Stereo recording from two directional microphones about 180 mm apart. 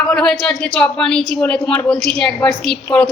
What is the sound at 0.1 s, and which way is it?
A woman's voice, 5° left (ahead or behind).